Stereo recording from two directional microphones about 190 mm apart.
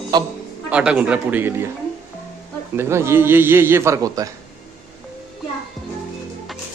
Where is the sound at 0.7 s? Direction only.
5° right (ahead or behind).